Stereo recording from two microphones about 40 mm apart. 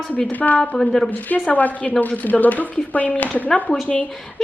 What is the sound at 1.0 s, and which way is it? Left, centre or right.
A woman's voice, left.